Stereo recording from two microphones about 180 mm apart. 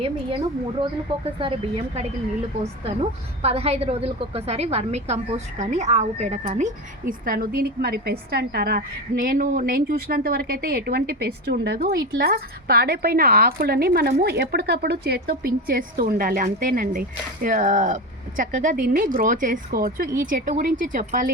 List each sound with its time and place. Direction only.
1.4 s a woman's voice: 30° right (ahead or behind)
7.1 s a woman's voice: 50° right (ahead or behind)